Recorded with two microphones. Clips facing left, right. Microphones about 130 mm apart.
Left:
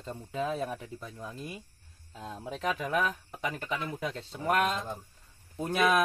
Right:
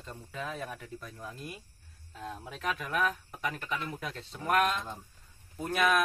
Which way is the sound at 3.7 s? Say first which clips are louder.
Left 3 dB; 35° left (ahead or behind).